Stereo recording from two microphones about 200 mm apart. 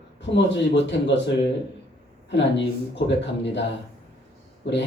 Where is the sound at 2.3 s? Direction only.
60° left (ahead or behind).